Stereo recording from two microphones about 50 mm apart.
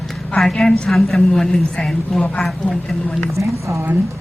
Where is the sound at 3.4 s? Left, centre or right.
Right.